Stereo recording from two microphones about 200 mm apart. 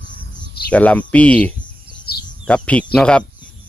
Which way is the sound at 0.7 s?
5° left (ahead or behind).